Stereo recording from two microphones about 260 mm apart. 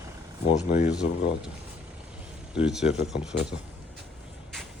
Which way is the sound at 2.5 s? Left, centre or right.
Centre.